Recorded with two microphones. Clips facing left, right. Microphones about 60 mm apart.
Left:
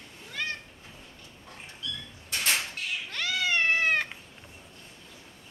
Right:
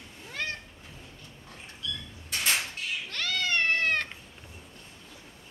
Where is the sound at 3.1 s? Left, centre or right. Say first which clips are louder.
Left 1 dB; centre.